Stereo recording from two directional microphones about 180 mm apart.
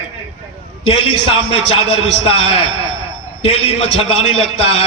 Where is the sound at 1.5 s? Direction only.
30° left (ahead or behind).